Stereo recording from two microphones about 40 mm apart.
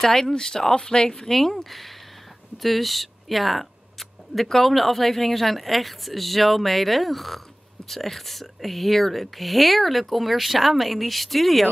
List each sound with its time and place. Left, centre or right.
0.0 s speech: centre
1.3 s speech: centre